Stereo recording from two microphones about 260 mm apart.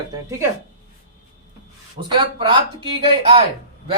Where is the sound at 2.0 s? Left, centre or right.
Centre.